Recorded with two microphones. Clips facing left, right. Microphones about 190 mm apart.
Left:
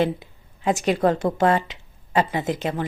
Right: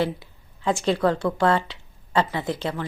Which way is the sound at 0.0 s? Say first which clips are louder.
Left 3 dB; 20° left (ahead or behind).